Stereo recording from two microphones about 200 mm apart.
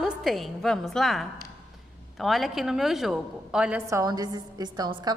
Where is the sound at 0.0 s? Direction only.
Centre (ahead or behind).